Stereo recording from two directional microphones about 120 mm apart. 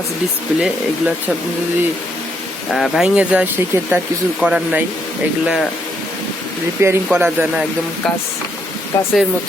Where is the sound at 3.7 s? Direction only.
25° right (ahead or behind).